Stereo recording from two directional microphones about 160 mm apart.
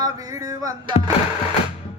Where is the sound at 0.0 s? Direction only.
20° right (ahead or behind).